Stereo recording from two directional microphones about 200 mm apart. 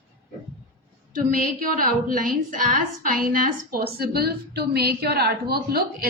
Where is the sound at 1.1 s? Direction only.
45° right (ahead or behind).